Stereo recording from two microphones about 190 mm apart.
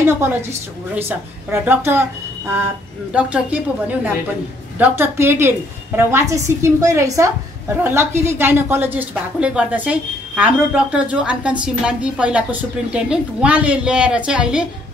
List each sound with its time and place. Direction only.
0.0 s a woman's voice: 10° right (ahead or behind)
3.1 s a woman's voice: 5° right (ahead or behind)
4.7 s a woman's voice: 10° right (ahead or behind)